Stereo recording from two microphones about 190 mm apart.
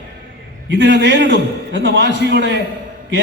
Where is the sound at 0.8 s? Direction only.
70° right (ahead or behind).